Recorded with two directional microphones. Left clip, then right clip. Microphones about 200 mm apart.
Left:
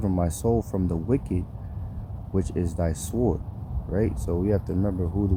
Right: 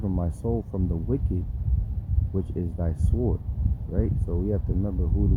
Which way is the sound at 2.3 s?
10° left (ahead or behind).